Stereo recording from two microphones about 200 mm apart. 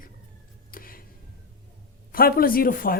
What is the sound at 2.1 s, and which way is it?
Speech, 45° left (ahead or behind).